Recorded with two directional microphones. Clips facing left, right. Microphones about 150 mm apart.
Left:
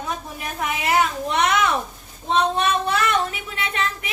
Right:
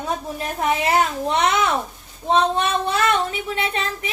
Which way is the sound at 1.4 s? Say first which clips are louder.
Left 1 dB; 25° right (ahead or behind).